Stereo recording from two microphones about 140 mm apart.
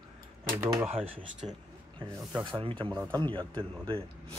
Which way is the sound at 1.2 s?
5° right (ahead or behind).